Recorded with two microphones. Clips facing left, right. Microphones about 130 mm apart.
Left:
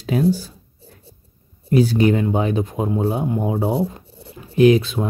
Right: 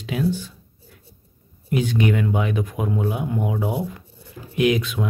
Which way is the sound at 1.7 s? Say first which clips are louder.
Left 5 dB; 35° left (ahead or behind).